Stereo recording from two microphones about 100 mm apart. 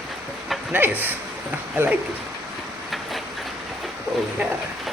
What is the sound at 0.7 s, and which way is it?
A man's voice, 20° right (ahead or behind).